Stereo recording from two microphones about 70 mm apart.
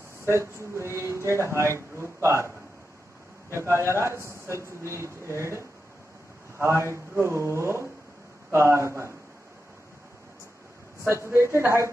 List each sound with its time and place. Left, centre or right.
0.2 s speech: right
3.7 s speech: right
11.1 s speech: right